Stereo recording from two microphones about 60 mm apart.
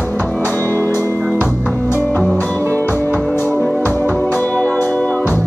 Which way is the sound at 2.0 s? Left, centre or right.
Left.